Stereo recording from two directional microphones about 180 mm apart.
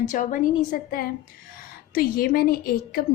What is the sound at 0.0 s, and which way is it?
A woman's voice, 45° left (ahead or behind).